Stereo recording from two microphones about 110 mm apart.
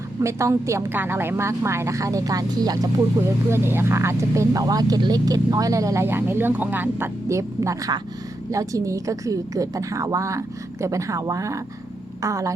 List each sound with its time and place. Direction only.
0.2 s speech: 25° right (ahead or behind)
3.5 s speech: 20° right (ahead or behind)